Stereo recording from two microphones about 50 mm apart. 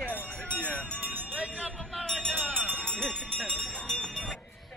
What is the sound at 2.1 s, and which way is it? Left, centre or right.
Music, centre.